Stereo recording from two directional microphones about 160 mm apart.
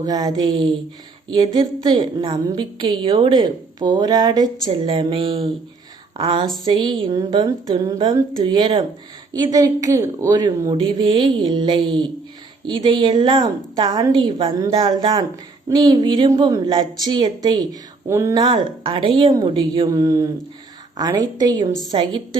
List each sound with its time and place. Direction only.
0.0 s a woman's voice: 25° right (ahead or behind)
18.3 s a woman's voice: 30° right (ahead or behind)